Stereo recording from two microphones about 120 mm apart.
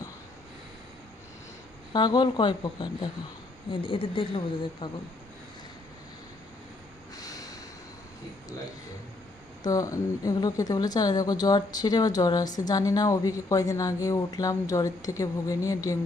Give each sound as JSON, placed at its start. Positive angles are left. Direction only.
{"t": 1.9, "sound": "a woman's voice", "side_deg": 35}
{"t": 7.2, "sound": "snort", "side_deg": 30}
{"t": 9.6, "sound": "speech", "side_deg": 30}